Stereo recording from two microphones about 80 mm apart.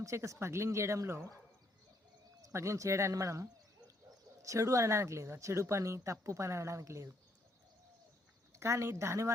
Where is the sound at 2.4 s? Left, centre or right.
Right.